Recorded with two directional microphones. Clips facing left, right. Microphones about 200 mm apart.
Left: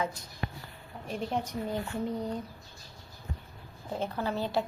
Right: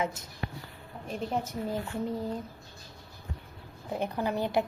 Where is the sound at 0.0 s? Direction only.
25° right (ahead or behind).